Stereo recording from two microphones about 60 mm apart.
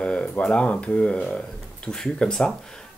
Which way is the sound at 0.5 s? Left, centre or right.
Centre.